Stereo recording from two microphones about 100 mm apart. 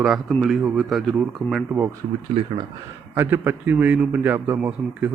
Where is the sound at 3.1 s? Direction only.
20° right (ahead or behind).